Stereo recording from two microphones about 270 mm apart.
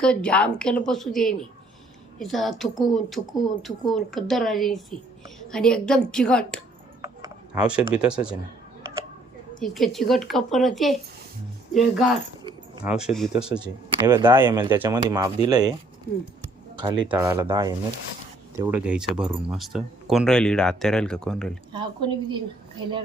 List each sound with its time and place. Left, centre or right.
0.0 s speech: centre
7.0 s a sound: centre
7.9 s speech: centre
9.6 s speech: centre
17.1 s speech: centre
21.7 s speech: centre